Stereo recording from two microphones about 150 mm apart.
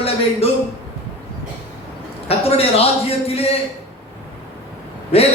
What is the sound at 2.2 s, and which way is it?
A man's voice, 40° left (ahead or behind).